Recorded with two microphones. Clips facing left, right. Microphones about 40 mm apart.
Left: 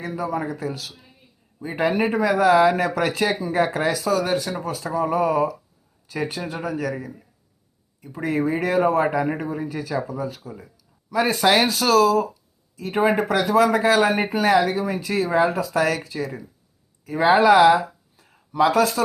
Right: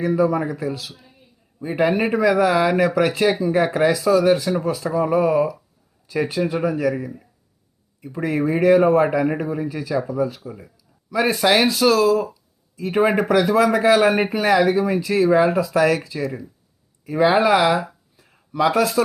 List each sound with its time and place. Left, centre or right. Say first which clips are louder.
0.0 s speech: right 7 dB; right
6.6 s speech: right 6 dB; right
11.1 s speech: right 1 dB; right
18.2 s a sound: even; right